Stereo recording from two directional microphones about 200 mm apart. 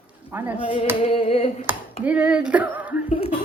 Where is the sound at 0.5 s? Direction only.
30° left (ahead or behind).